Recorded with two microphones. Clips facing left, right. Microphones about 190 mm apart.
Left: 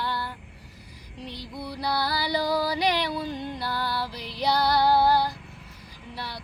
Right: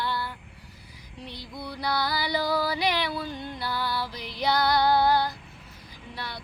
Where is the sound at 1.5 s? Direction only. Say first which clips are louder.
Left 1 dB; 10° left (ahead or behind).